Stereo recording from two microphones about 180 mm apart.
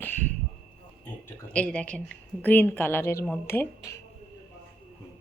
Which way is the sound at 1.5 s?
5° left (ahead or behind).